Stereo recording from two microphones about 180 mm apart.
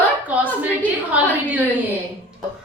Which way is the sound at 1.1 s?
10° right (ahead or behind).